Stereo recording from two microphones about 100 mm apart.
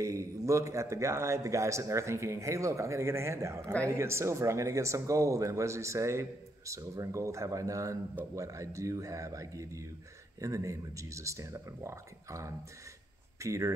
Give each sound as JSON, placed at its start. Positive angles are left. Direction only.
{"t": 0.0, "sound": "a man's voice", "side_deg": -30}